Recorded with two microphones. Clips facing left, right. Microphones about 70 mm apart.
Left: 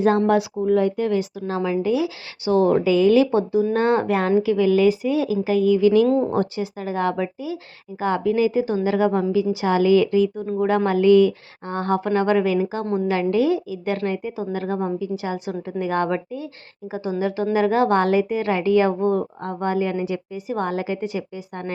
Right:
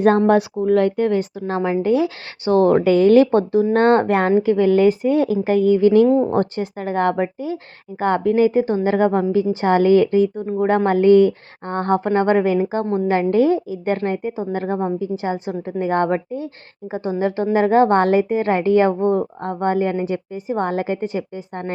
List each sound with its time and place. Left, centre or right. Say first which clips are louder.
0.3 s speech: right 3 dB; right
1.0 s speech: right 3 dB; right
4.3 s speech: right 1 dB; right
6.1 s speech: right 3 dB; centre
6.3 s a woman's voice: right 3 dB; right